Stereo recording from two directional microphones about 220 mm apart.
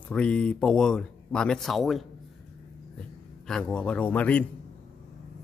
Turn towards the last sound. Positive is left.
turn(degrees=5)  # may be behind; listen again after turning